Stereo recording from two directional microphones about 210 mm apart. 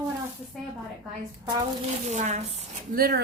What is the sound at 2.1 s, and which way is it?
Speech, 35° right (ahead or behind).